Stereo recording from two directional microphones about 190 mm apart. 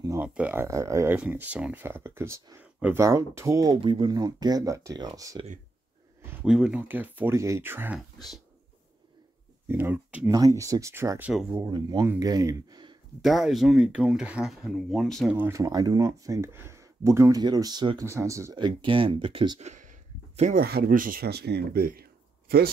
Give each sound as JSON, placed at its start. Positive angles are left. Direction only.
{"t": 0.0, "sound": "a sound", "side_deg": -15}
{"t": 0.3, "sound": "speech", "side_deg": -10}
{"t": 6.2, "sound": "speech", "side_deg": -5}
{"t": 9.7, "sound": "speech", "side_deg": -10}
{"t": 11.7, "sound": "speech", "side_deg": -20}
{"t": 13.2, "sound": "speech", "side_deg": 0}
{"t": 15.3, "sound": "speech", "side_deg": -15}
{"t": 19.6, "sound": "a sound", "side_deg": -40}
{"t": 20.6, "sound": "speech", "side_deg": -55}